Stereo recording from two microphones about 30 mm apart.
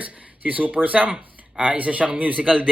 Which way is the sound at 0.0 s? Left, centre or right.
Right.